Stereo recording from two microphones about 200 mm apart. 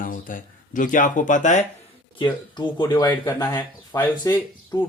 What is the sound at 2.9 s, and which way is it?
Speech, 15° left (ahead or behind).